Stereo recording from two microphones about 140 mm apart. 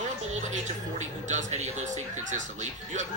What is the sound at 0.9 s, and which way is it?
Speech, 55° right (ahead or behind).